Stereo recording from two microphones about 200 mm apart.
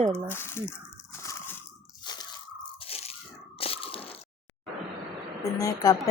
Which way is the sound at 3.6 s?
30° left (ahead or behind).